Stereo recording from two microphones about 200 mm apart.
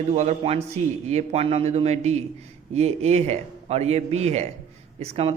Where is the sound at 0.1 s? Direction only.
30° right (ahead or behind).